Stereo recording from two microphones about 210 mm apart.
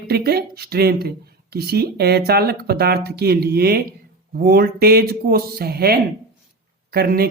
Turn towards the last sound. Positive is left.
turn(degrees=-45)  # may be behind; listen again after turning